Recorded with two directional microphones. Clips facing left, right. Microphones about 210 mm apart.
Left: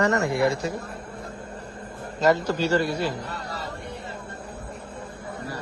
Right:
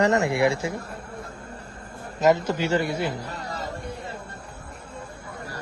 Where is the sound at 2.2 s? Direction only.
20° right (ahead or behind).